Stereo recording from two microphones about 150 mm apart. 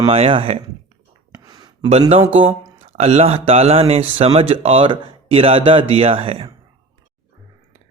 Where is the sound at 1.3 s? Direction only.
25° right (ahead or behind).